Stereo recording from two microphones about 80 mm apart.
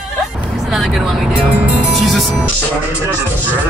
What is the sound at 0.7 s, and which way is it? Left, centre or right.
Vehicle, centre.